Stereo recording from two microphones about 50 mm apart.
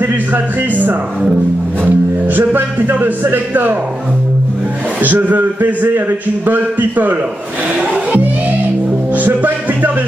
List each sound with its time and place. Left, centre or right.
0.0 s a man's voice: right
5.0 s a man's voice: right
7.9 s music: right